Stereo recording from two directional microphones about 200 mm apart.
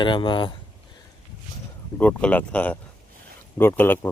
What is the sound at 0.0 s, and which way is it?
Speech, 25° left (ahead or behind).